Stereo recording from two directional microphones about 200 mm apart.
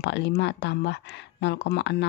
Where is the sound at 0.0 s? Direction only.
60° left (ahead or behind).